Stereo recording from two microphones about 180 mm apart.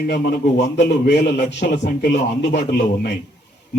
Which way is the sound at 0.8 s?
70° left (ahead or behind).